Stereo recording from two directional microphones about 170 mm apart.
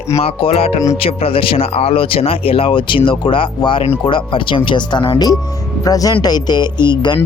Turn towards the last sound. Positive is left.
turn(degrees=25)  # may be behind; listen again after turning